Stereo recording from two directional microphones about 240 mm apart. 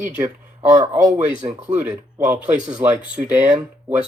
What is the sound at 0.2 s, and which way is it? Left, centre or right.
Speech, centre.